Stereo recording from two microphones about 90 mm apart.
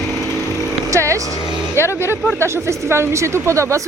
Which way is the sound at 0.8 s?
35° right (ahead or behind).